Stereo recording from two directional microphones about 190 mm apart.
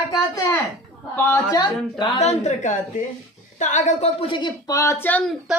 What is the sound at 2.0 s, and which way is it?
A woman's voice, 30° left (ahead or behind).